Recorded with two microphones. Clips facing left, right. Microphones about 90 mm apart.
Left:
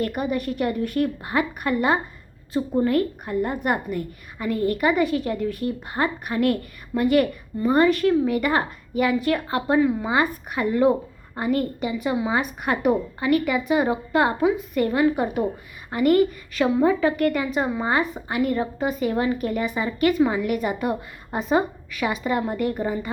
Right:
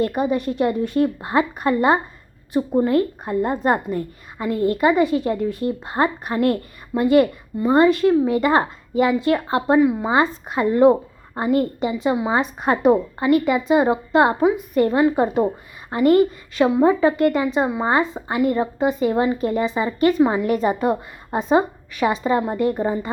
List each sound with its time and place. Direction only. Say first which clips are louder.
0.0 s a woman's voice: right 4 dB; 25° right (ahead or behind)